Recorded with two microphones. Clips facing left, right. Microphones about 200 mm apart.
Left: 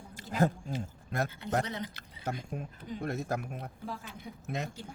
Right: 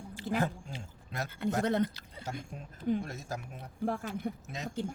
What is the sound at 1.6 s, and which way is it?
Speech, 55° right (ahead or behind).